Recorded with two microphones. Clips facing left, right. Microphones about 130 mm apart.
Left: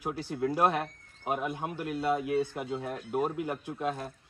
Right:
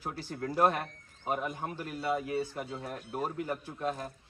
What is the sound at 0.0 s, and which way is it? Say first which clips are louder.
Speech: left 6 dB; 15° left (ahead or behind).